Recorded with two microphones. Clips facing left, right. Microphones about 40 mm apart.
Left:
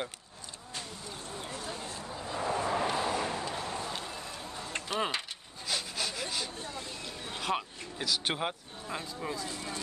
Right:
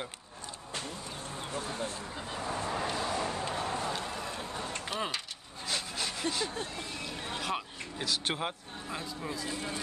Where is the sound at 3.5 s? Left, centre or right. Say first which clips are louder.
Right 3 dB; centre.